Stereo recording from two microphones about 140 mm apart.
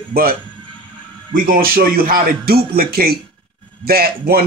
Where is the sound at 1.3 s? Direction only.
85° right.